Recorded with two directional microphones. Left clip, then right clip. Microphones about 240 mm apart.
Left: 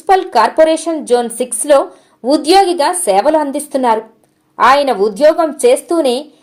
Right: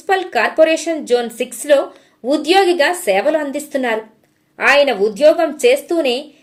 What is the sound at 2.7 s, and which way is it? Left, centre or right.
Speech, centre.